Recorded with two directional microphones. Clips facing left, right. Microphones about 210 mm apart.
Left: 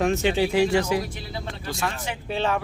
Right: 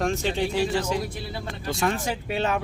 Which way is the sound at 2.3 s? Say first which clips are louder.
Left 1 dB; 10° right (ahead or behind).